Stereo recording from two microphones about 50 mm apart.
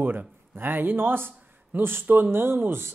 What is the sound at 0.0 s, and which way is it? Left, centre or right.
A man's voice, right.